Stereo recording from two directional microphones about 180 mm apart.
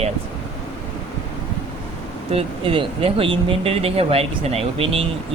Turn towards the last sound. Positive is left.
turn(degrees=-35)  # may be behind; listen again after turning